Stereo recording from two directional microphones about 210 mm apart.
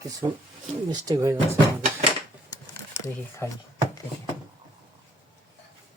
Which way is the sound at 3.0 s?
15° left (ahead or behind).